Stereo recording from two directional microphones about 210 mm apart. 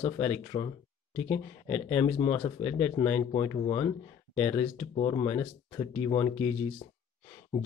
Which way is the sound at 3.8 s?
10° left (ahead or behind).